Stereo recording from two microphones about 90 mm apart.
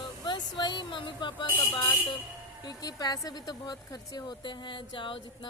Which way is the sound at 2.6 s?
45° left (ahead or behind).